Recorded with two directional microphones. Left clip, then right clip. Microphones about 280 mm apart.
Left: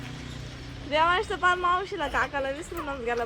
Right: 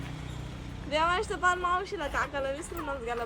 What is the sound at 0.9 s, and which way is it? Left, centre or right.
A woman's voice, centre.